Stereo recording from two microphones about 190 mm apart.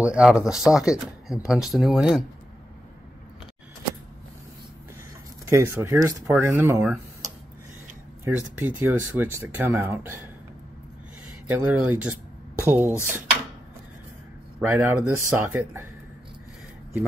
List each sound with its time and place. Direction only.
0.0 s speech: 5° right (ahead or behind)
5.5 s speech: 15° right (ahead or behind)
8.2 s speech: 10° right (ahead or behind)
11.4 s speech: 10° right (ahead or behind)
14.6 s speech: 15° right (ahead or behind)